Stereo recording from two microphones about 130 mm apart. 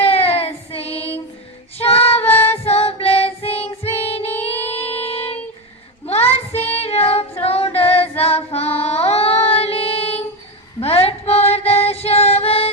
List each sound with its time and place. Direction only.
0.0 s child singing: 50° left (ahead or behind)
2.3 s child singing: 15° left (ahead or behind)
2.6 s child singing: 50° left (ahead or behind)
6.5 s female singing: 15° left (ahead or behind)
6.8 s female singing: 50° left (ahead or behind)
8.8 s music: 50° left (ahead or behind)